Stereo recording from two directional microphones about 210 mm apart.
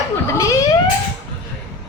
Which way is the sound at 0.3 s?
15° left (ahead or behind).